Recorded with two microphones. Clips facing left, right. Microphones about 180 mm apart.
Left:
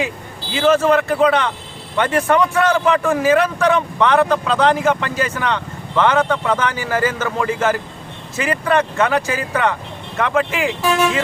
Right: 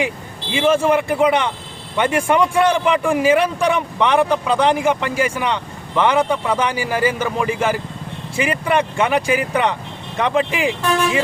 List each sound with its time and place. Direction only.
0.5 s speech: 10° right (ahead or behind)